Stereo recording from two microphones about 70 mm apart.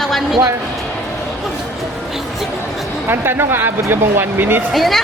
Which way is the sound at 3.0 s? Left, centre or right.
Right.